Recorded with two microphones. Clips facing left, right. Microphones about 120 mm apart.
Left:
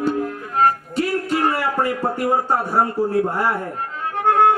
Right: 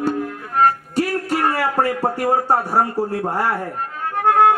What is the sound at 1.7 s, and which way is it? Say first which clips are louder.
A man's voice: right 2 dB; 40° right (ahead or behind).